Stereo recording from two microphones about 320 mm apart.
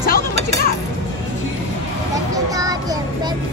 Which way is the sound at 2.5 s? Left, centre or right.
Centre.